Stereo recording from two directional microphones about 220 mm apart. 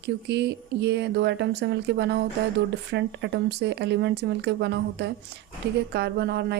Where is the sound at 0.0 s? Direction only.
50° right (ahead or behind).